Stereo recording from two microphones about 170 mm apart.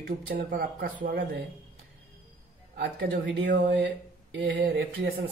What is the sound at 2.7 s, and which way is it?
Speech, 90° right.